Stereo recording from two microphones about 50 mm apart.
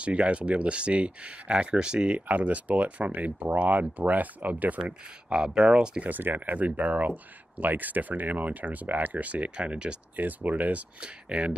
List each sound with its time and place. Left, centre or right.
0.0 s speech: right
2.1 s speech: right
6.0 s speech: right
10.1 s speech: right